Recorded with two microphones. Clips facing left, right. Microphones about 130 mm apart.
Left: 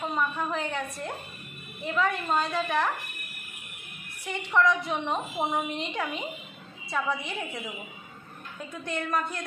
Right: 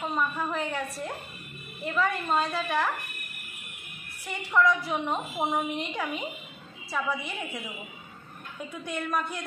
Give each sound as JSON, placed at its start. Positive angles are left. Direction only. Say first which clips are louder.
{"t": 0.0, "sound": "a woman's voice", "louder": "even", "side_deg": 0}
{"t": 4.3, "sound": "a woman's voice", "louder": "even", "side_deg": 0}
{"t": 8.8, "sound": "a woman's voice", "louder": "left 1 dB", "side_deg": -5}